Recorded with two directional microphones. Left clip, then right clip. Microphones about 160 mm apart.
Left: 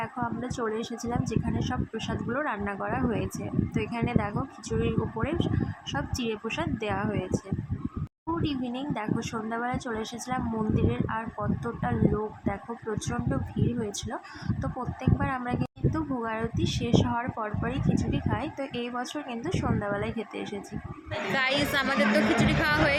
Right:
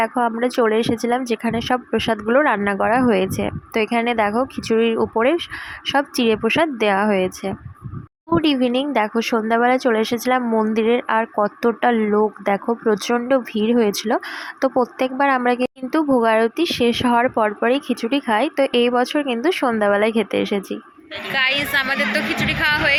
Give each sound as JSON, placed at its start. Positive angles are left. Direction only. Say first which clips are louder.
{"t": 0.0, "sound": "a woman's voice", "louder": "right 14 dB", "side_deg": -40}
{"t": 21.3, "sound": "a woman's voice", "louder": "right 8 dB", "side_deg": 10}